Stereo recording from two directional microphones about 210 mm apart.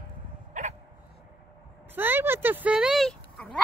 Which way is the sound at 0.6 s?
35° right (ahead or behind).